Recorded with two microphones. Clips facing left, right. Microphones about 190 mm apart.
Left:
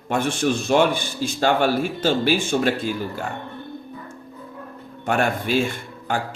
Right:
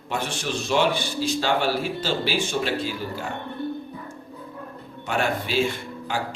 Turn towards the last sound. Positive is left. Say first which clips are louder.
# left 3 dB
turn(degrees=50)  # may be behind; listen again after turning